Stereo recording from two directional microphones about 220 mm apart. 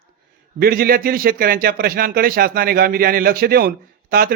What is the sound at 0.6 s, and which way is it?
Speech, 40° right (ahead or behind).